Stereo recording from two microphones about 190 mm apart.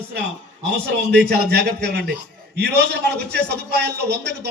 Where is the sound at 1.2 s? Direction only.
60° right (ahead or behind).